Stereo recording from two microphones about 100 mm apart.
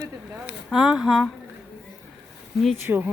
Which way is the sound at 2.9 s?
20° right (ahead or behind).